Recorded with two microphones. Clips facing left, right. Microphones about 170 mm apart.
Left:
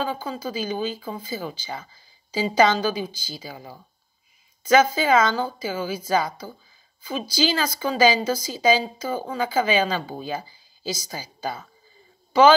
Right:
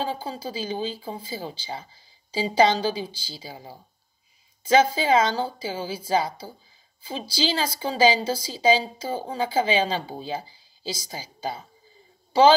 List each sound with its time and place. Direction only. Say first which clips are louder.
0.0 s speech: left 2 dB; 30° right (ahead or behind)